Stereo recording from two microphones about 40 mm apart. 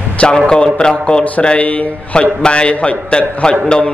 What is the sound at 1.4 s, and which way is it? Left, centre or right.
A man's voice, left.